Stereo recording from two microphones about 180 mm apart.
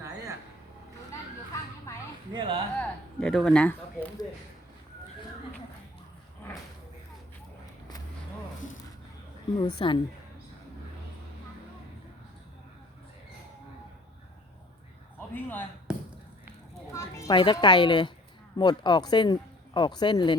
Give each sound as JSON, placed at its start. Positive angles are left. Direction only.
{"t": 1.9, "sound": "a sound", "side_deg": 15}
{"t": 2.3, "sound": "speech", "side_deg": -25}
{"t": 2.7, "sound": "speech", "side_deg": 5}
{"t": 9.6, "sound": "speech", "side_deg": 25}
{"t": 15.4, "sound": "speech", "side_deg": 10}
{"t": 16.9, "sound": "a child's voice", "side_deg": 15}